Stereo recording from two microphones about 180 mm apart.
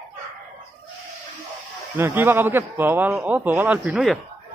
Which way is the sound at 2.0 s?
10° right (ahead or behind).